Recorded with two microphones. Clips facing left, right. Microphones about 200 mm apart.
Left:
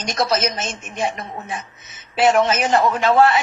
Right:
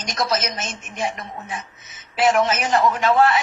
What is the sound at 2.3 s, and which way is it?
Speech, 30° left (ahead or behind).